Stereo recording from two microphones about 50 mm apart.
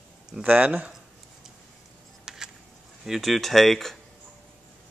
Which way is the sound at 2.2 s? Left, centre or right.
Centre.